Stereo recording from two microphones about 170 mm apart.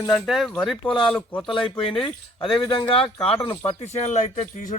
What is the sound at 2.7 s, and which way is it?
Speech, 30° left (ahead or behind).